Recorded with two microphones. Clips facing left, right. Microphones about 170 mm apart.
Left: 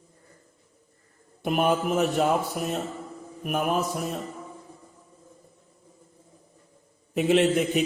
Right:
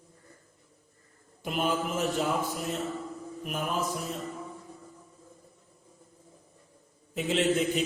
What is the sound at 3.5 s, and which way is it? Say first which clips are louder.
Speech: left 7 dB; 65° left (ahead or behind).